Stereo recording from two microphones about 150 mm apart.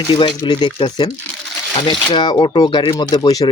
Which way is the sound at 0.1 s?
35° left (ahead or behind).